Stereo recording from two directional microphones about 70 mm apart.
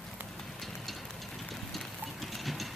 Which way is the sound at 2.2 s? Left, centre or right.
Centre.